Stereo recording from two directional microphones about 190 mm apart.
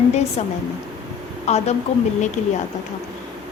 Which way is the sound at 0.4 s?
35° left (ahead or behind).